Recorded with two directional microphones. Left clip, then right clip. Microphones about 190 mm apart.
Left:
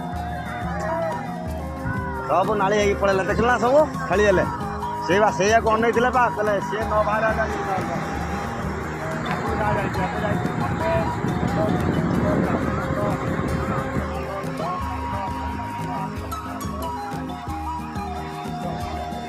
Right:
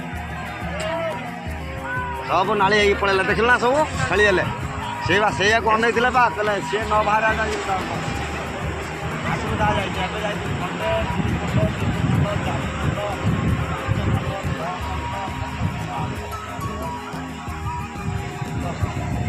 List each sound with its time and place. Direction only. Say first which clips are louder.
2.3 s speech: right 2 dB; 50° left (ahead or behind)